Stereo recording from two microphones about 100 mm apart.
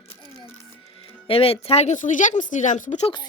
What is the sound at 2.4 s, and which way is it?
Speech, 45° left (ahead or behind).